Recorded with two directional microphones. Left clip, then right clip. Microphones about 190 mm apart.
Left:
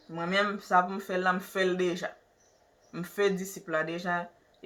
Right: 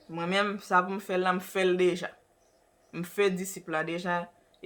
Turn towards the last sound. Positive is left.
turn(degrees=-25)  # may be behind; listen again after turning